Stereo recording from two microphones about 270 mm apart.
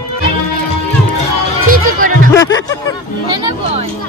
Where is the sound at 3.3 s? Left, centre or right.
Centre.